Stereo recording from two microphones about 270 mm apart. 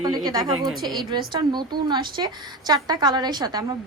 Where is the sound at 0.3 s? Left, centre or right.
Centre.